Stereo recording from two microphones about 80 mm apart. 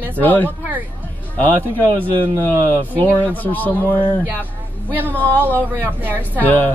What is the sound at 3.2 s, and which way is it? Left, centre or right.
Speech, left.